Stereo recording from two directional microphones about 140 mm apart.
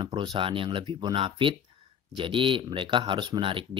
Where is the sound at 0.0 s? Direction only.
35° right (ahead or behind).